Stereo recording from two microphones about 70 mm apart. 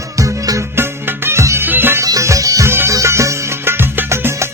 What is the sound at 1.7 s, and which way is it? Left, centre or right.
Music, right.